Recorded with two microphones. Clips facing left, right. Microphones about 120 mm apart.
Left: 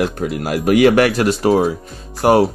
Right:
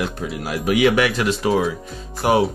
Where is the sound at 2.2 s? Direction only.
50° left (ahead or behind).